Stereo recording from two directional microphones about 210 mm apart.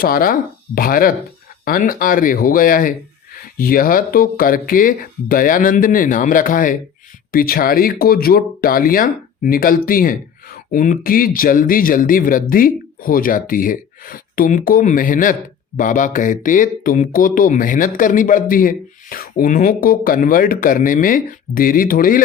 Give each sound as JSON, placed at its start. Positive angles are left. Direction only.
{"t": 0.0, "sound": "speech", "side_deg": 45}